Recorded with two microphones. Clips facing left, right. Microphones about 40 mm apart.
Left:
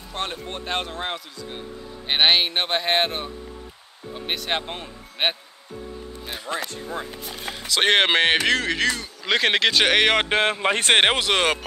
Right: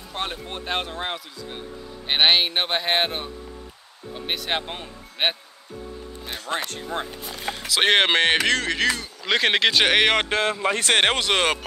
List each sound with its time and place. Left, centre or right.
0.1 s speech: centre
4.3 s speech: centre
6.5 s speech: right
7.5 s speech: centre
10.3 s speech: left
11.0 s speech: centre
11.2 s speech: centre